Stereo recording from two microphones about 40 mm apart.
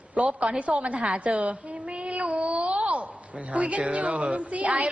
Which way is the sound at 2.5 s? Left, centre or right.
Right.